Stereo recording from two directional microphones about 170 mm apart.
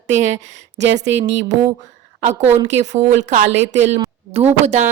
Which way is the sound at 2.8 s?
45° right (ahead or behind).